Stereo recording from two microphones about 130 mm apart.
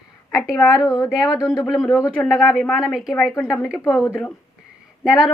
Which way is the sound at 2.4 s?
Centre (ahead or behind).